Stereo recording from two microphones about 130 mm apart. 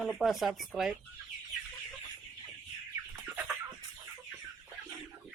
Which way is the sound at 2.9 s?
15° right (ahead or behind).